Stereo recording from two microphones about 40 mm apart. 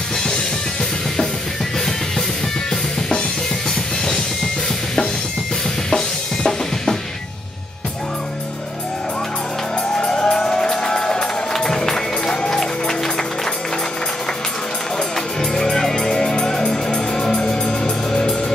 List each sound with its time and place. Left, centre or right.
5.9 s drum: centre
9.9 s music: centre
15.5 s music: centre